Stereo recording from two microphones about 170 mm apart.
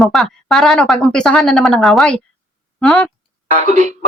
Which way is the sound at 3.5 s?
45° right (ahead or behind).